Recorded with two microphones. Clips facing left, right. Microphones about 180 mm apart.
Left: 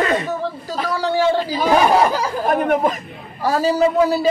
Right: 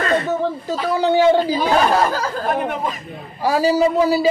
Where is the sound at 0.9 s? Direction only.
20° right (ahead or behind).